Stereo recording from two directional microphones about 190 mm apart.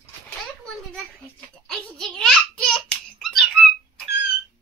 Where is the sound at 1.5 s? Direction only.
5° left (ahead or behind).